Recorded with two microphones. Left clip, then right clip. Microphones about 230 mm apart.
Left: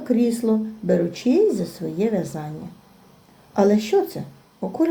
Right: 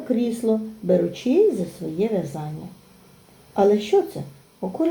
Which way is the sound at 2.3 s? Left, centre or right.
Left.